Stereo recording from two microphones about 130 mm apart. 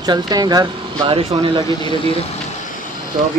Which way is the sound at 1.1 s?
45° right (ahead or behind).